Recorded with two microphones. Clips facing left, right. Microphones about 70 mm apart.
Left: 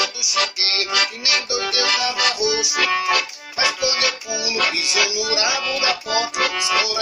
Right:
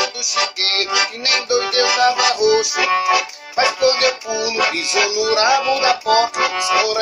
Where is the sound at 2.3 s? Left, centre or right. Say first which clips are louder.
Right 7 dB; right.